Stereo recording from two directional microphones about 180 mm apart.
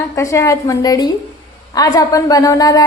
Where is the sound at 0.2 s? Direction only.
15° left (ahead or behind).